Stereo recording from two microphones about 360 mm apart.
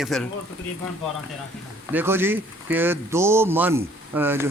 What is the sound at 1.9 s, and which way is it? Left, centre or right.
Speech, centre.